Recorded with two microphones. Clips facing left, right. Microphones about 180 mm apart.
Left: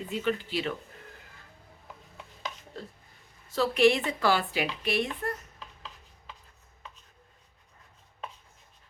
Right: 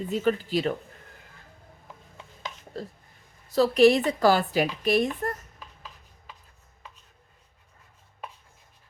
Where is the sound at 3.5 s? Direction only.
40° right (ahead or behind).